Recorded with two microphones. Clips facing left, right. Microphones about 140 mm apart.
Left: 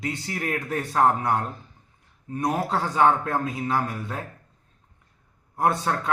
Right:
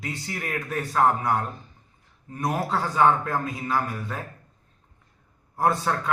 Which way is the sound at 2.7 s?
20° left (ahead or behind).